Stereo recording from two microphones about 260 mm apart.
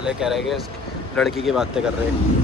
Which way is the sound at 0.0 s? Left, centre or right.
Centre.